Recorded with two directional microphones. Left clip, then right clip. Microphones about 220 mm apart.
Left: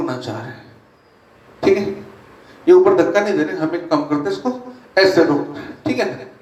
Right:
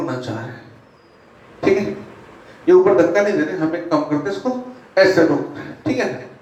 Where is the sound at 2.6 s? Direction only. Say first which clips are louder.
Left 1 dB; 40° left (ahead or behind).